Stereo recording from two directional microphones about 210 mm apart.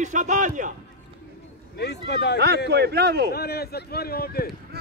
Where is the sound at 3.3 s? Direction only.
50° left (ahead or behind).